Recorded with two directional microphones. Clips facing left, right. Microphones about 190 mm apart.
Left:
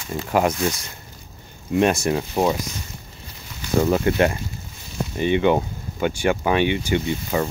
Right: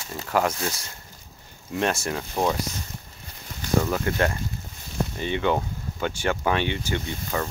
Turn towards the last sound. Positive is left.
turn(degrees=15)  # may be behind; listen again after turning